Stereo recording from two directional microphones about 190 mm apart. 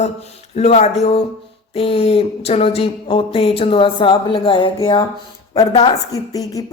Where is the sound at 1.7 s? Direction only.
30° left (ahead or behind).